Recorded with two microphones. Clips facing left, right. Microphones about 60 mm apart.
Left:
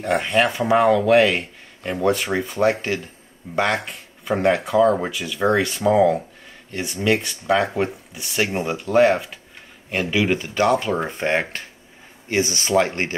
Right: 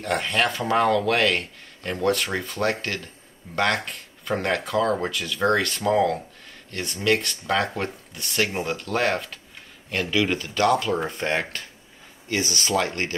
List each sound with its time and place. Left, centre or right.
0.0 s speech: centre